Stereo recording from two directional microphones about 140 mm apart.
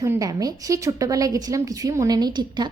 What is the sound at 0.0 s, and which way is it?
A woman's voice, 25° right (ahead or behind).